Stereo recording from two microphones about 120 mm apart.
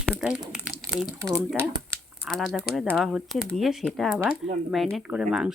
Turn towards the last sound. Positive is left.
turn(degrees=-5)  # may be behind; listen again after turning